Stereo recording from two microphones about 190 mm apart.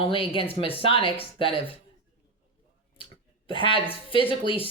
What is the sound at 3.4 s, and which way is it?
Speech, 25° left (ahead or behind).